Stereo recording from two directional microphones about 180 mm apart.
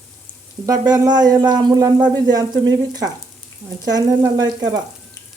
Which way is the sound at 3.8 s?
20° right (ahead or behind).